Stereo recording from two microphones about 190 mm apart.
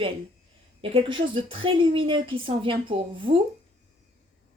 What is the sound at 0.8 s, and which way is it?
A woman's voice, 30° right (ahead or behind).